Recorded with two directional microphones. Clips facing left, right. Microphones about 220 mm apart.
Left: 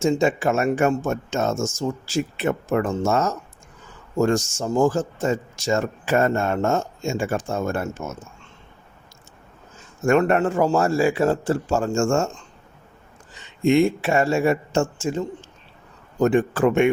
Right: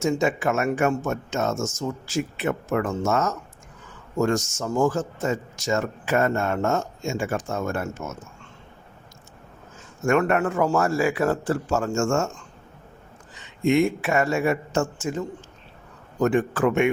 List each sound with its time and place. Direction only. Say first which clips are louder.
0.0 s a man's voice: left 3 dB; 30° left (ahead or behind)
10.1 s a man's voice: left 3 dB; 30° left (ahead or behind)
13.7 s a man's voice: left 3 dB; 30° left (ahead or behind)
16.2 s a man's voice: left 3 dB; 30° left (ahead or behind)